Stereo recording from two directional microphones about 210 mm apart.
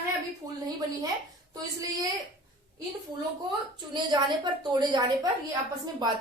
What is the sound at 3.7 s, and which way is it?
A woman's voice, 20° right (ahead or behind).